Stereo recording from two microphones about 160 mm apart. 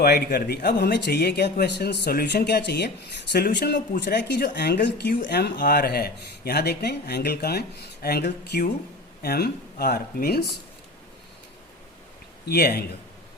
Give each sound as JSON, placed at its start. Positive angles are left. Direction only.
{"t": 0.0, "sound": "speech", "side_deg": 80}
{"t": 3.3, "sound": "speech", "side_deg": 80}
{"t": 12.5, "sound": "a man's voice", "side_deg": 85}